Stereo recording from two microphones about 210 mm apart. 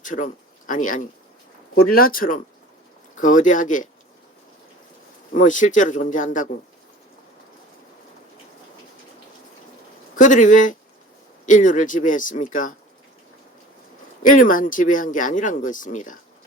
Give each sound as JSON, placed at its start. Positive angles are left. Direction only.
{"t": 0.0, "sound": "speech", "side_deg": 40}
{"t": 5.3, "sound": "speech", "side_deg": 40}
{"t": 10.2, "sound": "speech", "side_deg": 40}
{"t": 14.2, "sound": "speech", "side_deg": 40}